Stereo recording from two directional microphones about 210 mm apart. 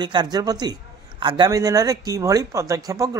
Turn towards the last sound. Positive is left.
turn(degrees=-15)  # may be behind; listen again after turning